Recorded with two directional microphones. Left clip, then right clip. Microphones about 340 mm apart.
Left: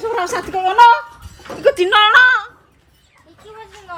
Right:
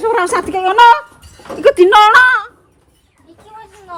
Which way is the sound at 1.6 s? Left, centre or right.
Centre.